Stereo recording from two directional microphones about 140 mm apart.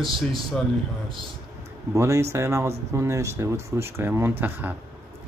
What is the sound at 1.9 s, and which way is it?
Speech, 20° right (ahead or behind).